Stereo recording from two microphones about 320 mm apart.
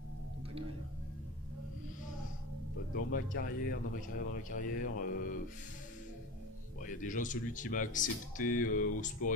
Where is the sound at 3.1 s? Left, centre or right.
Left.